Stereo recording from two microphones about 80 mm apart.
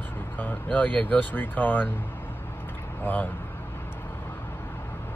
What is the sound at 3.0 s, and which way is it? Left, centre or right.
Speech, left.